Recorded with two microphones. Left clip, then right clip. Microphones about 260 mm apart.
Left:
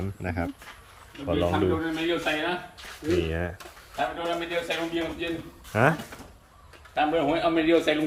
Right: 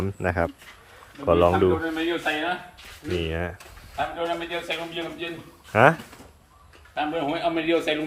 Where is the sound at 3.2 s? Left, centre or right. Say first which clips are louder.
Right 1 dB; centre.